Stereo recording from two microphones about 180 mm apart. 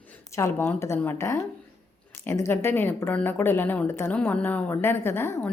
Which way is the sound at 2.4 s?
10° left (ahead or behind).